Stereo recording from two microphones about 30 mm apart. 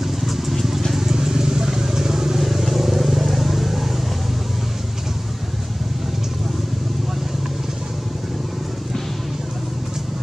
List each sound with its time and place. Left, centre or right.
0.0 s vehicle: centre
0.9 s vehicle: centre
2.4 s vehicle: centre